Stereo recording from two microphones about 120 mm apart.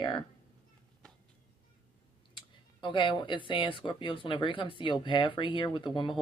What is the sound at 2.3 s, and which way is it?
Speech, 40° left (ahead or behind).